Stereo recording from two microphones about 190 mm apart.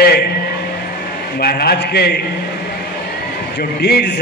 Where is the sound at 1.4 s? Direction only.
55° left (ahead or behind).